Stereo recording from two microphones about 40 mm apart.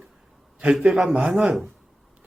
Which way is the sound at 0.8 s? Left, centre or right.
Centre.